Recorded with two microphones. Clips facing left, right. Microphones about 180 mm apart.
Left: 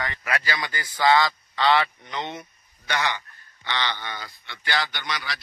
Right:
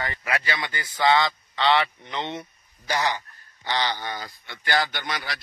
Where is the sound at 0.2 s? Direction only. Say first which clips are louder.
Even; 25° right (ahead or behind).